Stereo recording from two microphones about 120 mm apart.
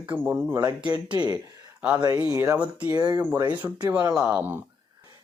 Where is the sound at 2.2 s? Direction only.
25° right (ahead or behind).